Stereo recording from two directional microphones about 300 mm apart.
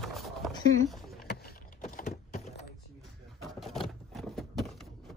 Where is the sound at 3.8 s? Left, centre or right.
Centre.